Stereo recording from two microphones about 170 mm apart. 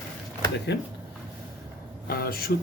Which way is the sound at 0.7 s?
80° left.